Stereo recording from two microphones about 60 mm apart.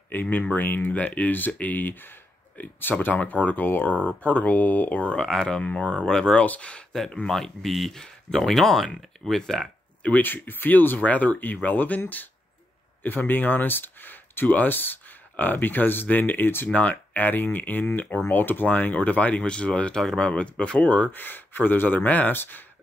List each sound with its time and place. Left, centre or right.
0.1 s speech: left
5.2 s speech: centre
6.4 s speech: left
6.9 s speech: centre
10.0 s speech: left
13.0 s speech: left
21.1 s speech: left